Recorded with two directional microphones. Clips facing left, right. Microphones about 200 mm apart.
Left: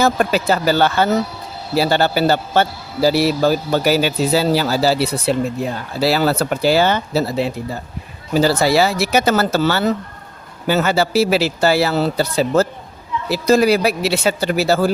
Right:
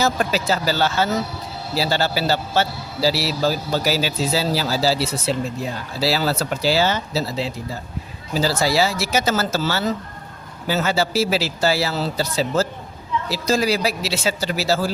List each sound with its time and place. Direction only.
0.0 s a man's voice: 55° left (ahead or behind)